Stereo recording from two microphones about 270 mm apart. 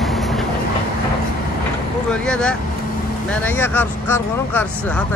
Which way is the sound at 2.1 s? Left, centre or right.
Centre.